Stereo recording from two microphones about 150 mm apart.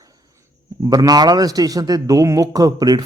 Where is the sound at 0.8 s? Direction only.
25° right (ahead or behind).